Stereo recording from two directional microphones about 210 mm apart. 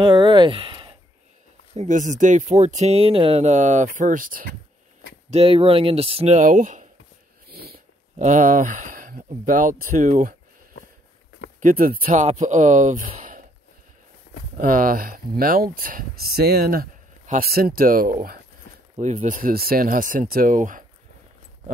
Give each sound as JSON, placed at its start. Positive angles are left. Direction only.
{"t": 0.0, "sound": "speech", "side_deg": -20}
{"t": 1.8, "sound": "speech", "side_deg": -35}
{"t": 5.3, "sound": "speech", "side_deg": -25}
{"t": 7.4, "sound": "speech", "side_deg": -45}
{"t": 11.6, "sound": "speech", "side_deg": -40}
{"t": 14.3, "sound": "a sound", "side_deg": 60}
{"t": 14.6, "sound": "speech", "side_deg": -40}